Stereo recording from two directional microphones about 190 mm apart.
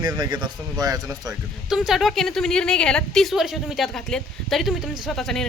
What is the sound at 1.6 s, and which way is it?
A woman's voice, centre (ahead or behind).